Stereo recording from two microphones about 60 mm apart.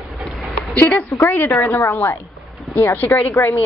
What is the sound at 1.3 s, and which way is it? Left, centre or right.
Speech, left.